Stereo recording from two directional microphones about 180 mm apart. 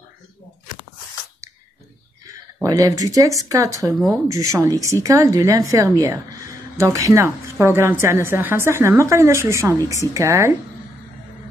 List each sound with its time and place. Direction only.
2.6 s a woman's voice: 20° right (ahead or behind)